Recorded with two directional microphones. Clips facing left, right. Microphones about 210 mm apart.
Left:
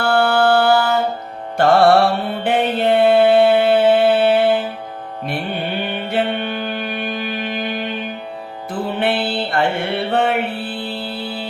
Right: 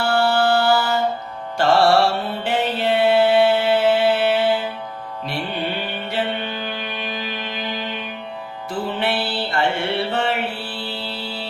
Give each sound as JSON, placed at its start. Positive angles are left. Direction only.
{"t": 0.0, "sound": "music", "side_deg": 55}
{"t": 6.1, "sound": "music", "side_deg": 55}
{"t": 9.0, "sound": "music", "side_deg": 55}